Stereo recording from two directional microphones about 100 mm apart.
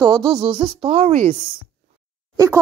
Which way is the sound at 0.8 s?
90° right.